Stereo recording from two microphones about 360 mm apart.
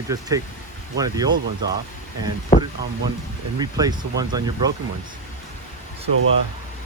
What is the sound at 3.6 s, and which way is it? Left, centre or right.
Speech, centre.